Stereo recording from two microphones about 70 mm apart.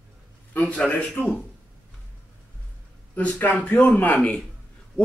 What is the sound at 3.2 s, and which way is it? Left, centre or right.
A man's voice, left.